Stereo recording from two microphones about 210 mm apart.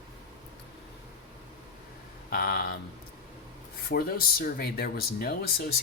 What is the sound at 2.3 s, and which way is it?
Speech, 45° left (ahead or behind).